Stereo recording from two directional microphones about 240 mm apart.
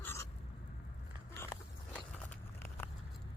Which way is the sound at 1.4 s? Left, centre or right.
Centre.